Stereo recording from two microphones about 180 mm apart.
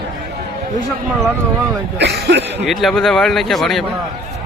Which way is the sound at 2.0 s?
65° right (ahead or behind).